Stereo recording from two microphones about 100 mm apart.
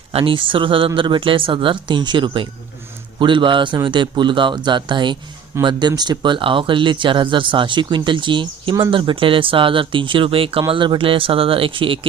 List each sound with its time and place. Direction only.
0.1 s speech: 65° right (ahead or behind)
5.5 s speech: 25° right (ahead or behind)
6.0 s speech: 50° right (ahead or behind)